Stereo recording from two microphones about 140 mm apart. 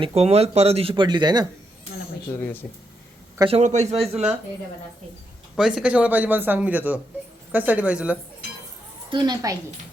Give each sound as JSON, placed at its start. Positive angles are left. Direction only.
{"t": 0.0, "sound": "speech", "side_deg": -45}
{"t": 2.4, "sound": "speech", "side_deg": 15}
{"t": 3.5, "sound": "a man's voice", "side_deg": -55}
{"t": 4.0, "sound": "speech", "side_deg": -5}
{"t": 5.5, "sound": "speech", "side_deg": -5}
{"t": 9.0, "sound": "a woman's voice", "side_deg": -30}